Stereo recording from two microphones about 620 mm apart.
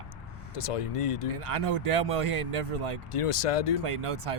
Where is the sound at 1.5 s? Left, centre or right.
Right.